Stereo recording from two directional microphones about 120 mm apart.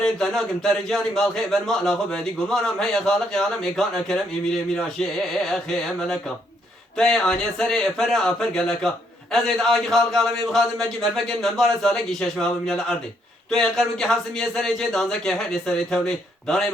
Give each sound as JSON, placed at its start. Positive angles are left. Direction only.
{"t": 0.0, "sound": "a man's voice", "side_deg": 5}